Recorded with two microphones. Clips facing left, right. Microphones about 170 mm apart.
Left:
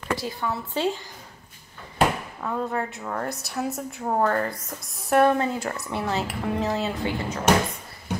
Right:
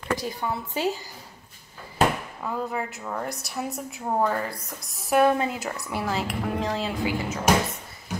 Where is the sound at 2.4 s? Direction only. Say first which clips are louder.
Left 2 dB; 5° right (ahead or behind).